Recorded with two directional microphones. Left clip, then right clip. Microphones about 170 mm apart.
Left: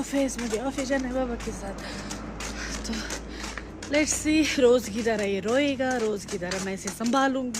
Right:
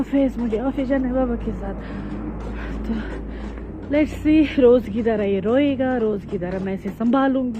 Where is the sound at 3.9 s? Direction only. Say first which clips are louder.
Right 5 dB; 15° left (ahead or behind).